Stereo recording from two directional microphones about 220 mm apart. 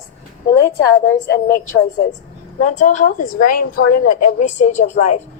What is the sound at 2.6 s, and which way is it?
A woman's voice, 35° left (ahead or behind).